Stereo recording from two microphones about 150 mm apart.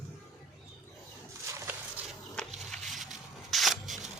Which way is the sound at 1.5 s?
20° right (ahead or behind).